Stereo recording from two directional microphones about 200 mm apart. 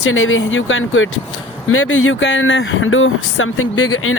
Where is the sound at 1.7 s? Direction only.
90° left.